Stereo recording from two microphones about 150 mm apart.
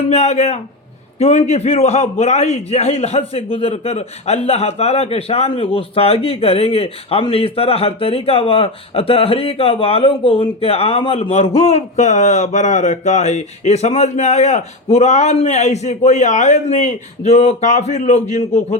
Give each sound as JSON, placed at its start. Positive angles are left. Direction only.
{"t": 0.1, "sound": "a man's voice", "side_deg": 45}